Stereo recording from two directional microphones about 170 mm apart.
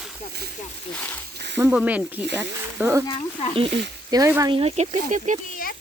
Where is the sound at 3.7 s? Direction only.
90° right.